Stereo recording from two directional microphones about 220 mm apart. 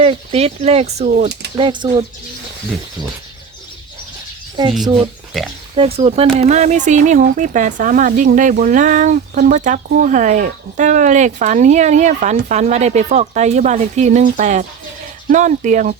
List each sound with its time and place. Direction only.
0.0 s speech: 25° right (ahead or behind)
5.3 s speech: centre (ahead or behind)
5.7 s speech: 25° right (ahead or behind)